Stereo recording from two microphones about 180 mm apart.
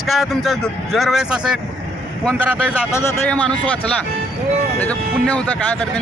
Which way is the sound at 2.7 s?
10° left (ahead or behind).